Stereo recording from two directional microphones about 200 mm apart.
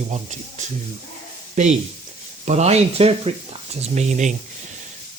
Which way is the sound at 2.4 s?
35° right (ahead or behind).